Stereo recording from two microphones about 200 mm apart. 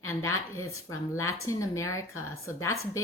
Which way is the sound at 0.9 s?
15° left (ahead or behind).